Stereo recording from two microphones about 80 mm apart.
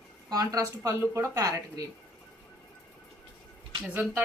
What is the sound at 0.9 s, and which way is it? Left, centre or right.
Speech, right.